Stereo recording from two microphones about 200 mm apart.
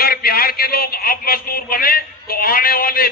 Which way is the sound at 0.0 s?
45° left (ahead or behind).